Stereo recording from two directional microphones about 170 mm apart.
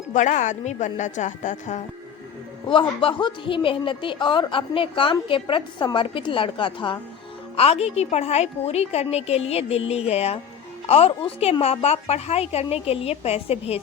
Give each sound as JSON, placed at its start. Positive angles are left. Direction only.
{"t": 0.1, "sound": "a woman's voice", "side_deg": 45}
{"t": 2.6, "sound": "a woman's voice", "side_deg": 30}